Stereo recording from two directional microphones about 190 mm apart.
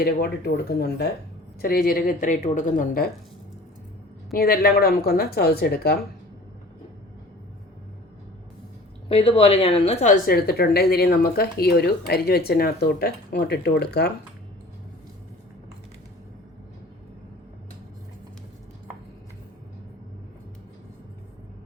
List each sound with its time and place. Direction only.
0.0 s a woman's voice: 55° left (ahead or behind)
4.4 s speech: 50° left (ahead or behind)
9.0 s a woman's voice: 30° left (ahead or behind); by 14.1 s 60° left (ahead or behind)